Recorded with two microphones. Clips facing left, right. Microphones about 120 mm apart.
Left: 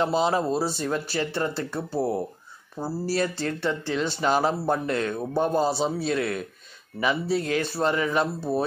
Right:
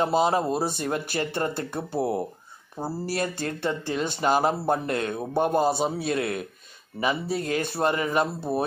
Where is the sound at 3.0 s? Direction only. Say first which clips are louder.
Left 4 dB; 50° right (ahead or behind).